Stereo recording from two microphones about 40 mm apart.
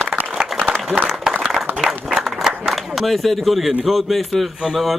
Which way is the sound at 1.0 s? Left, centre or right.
Centre.